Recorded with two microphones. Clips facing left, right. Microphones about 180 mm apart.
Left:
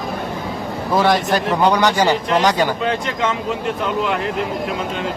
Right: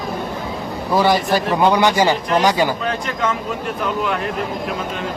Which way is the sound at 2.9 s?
25° left (ahead or behind).